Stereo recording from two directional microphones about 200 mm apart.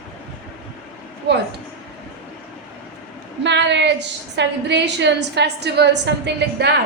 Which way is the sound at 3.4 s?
60° right (ahead or behind).